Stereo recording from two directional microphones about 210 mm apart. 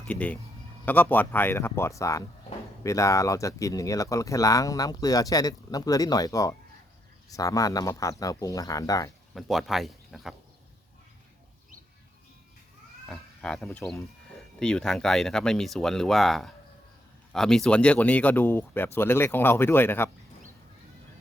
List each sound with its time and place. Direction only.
0.0 s a man's voice: 5° left (ahead or behind)
9.3 s speech: centre (ahead or behind)
13.1 s speech: 5° left (ahead or behind)